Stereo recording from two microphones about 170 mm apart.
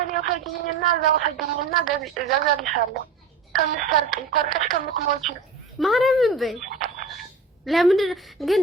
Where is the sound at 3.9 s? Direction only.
Centre (ahead or behind).